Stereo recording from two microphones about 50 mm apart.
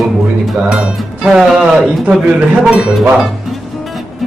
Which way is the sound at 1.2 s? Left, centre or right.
Centre.